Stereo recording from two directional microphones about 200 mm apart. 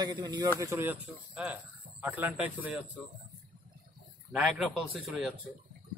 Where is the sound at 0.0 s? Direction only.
20° right (ahead or behind).